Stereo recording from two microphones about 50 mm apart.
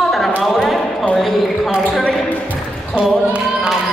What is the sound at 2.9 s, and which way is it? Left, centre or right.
Speech, right.